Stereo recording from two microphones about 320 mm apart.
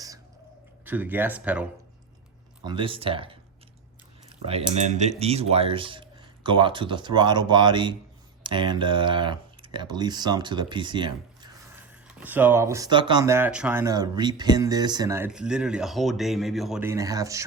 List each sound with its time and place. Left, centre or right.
0.9 s speech: centre
2.6 s speech: centre